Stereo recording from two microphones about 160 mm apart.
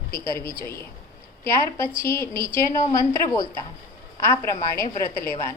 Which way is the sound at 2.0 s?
15° left (ahead or behind).